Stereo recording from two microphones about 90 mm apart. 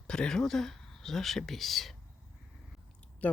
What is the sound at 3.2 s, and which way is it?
Speech, 15° left (ahead or behind).